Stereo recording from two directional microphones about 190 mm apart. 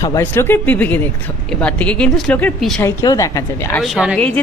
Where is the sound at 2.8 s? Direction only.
20° left (ahead or behind).